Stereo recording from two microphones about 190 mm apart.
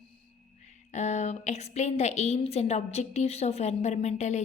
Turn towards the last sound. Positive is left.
turn(degrees=35)  # may be behind; listen again after turning